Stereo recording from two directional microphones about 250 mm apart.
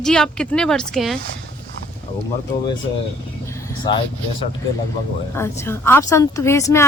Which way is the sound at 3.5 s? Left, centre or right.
Centre.